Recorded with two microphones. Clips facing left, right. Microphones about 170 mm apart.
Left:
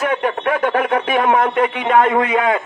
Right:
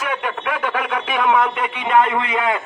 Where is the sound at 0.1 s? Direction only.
45° left (ahead or behind).